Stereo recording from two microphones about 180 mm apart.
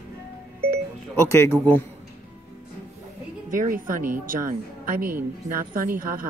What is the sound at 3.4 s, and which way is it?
A woman's voice, 50° right (ahead or behind).